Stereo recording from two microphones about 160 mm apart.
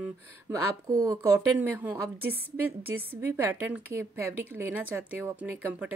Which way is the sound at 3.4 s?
10° right (ahead or behind).